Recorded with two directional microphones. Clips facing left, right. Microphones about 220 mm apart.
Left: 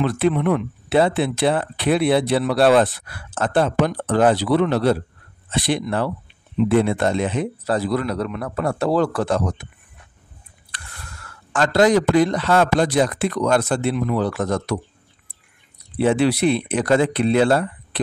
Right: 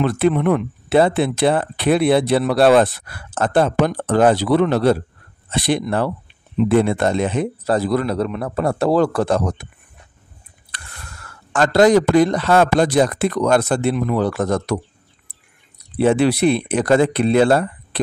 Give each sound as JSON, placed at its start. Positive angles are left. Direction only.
{"t": 0.0, "sound": "speech", "side_deg": -50}
{"t": 8.1, "sound": "a man's voice", "side_deg": -30}
{"t": 11.5, "sound": "speech", "side_deg": -40}
{"t": 16.0, "sound": "speech", "side_deg": -45}